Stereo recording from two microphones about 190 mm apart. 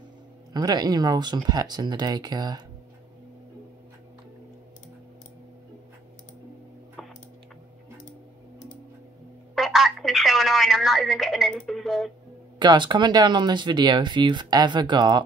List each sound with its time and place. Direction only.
0.5 s speech: 20° right (ahead or behind)
7.0 s typing: centre (ahead or behind)
9.6 s telephone: centre (ahead or behind)
12.5 s speech: 25° right (ahead or behind)